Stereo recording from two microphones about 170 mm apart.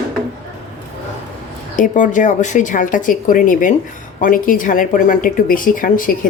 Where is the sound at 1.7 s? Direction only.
50° left (ahead or behind).